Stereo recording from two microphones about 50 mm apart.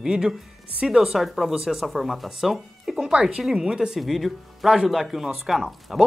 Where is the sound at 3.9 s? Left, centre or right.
Centre.